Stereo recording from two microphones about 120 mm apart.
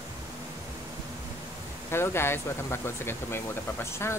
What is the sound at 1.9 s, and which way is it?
Speech, 20° left (ahead or behind).